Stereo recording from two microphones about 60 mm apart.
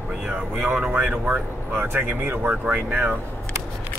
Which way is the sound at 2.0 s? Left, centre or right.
Right.